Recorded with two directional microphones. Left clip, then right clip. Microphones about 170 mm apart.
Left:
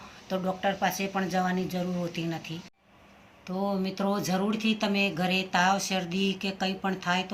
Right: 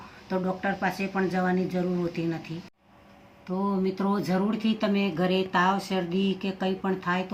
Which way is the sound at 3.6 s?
55° left (ahead or behind).